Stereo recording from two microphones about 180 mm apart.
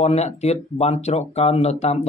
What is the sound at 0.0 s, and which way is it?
Speech, 40° left (ahead or behind).